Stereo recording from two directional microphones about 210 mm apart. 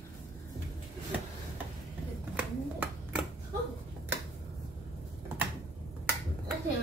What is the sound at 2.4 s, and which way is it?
Finger snapping, 5° right (ahead or behind).